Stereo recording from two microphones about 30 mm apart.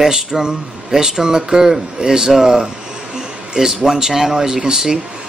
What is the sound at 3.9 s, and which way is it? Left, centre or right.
A man's voice, centre.